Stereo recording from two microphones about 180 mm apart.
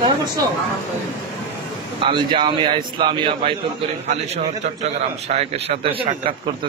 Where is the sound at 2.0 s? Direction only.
25° right (ahead or behind).